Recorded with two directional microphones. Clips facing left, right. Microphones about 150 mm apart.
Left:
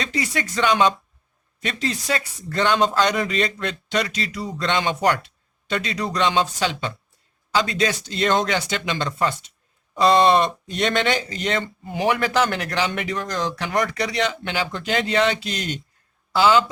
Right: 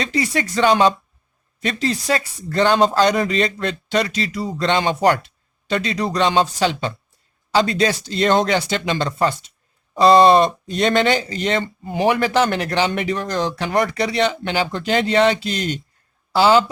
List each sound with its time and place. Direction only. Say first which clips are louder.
0.0 s speech: right 4 dB; 35° right (ahead or behind)